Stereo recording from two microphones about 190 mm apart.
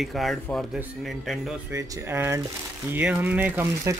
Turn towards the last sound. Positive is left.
turn(degrees=-15)  # may be behind; listen again after turning